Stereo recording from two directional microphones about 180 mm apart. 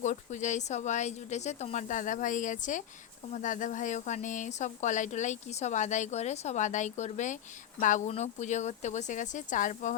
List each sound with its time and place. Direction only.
0.0 s speech: 45° left (ahead or behind)